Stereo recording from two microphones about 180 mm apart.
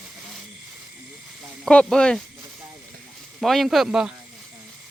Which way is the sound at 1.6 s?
5° left (ahead or behind).